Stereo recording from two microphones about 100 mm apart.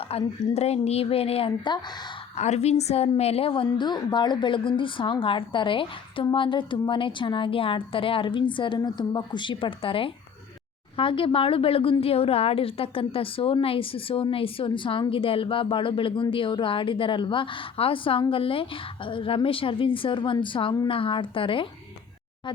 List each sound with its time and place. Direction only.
0.1 s a woman's voice: 85° left
1.5 s speech: 50° left (ahead or behind)
2.3 s speech: 90° left; by 21.7 s 60° left (ahead or behind)